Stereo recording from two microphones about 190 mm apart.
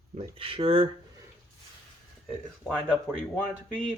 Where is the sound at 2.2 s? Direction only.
Centre (ahead or behind).